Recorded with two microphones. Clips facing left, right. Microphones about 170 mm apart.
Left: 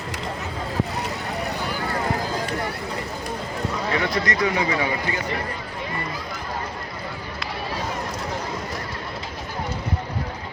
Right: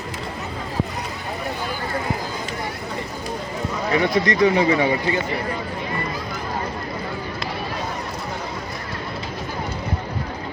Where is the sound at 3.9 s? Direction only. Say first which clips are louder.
Right 7 dB; 20° right (ahead or behind).